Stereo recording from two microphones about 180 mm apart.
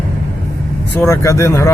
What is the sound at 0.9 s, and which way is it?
Speech, 15° left (ahead or behind).